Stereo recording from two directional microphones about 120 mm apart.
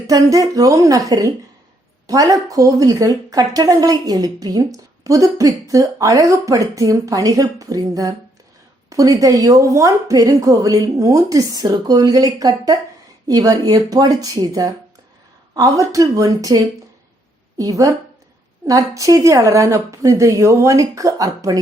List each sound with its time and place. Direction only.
0.1 s speech: 30° right (ahead or behind)
17.6 s speech: 30° right (ahead or behind)